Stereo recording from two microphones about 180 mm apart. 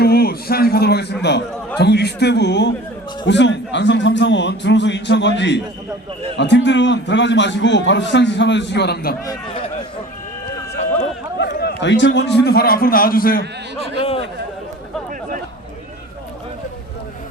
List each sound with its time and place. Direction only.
0.0 s a man's voice: 60° left (ahead or behind)
9.2 s speech: 20° left (ahead or behind)
10.8 s a sound: 40° left (ahead or behind)
11.3 s a sound: 70° left (ahead or behind)
12.5 s a man's voice: 60° left (ahead or behind)
14.0 s speech: 30° left (ahead or behind)